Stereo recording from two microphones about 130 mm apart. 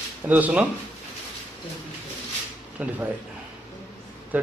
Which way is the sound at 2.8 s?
10° right (ahead or behind).